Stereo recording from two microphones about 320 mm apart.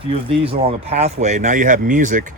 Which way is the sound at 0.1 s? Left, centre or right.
Centre.